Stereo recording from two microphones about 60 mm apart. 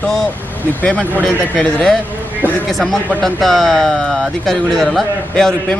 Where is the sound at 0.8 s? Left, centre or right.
Left.